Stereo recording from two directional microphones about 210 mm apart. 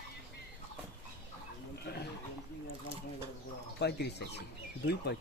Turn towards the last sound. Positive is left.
turn(degrees=50)  # may be behind; listen again after turning